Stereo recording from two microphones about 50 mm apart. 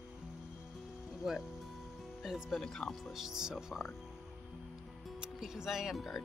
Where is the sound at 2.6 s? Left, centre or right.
Centre.